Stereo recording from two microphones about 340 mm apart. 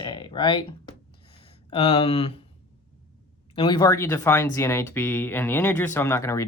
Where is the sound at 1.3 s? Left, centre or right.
Centre.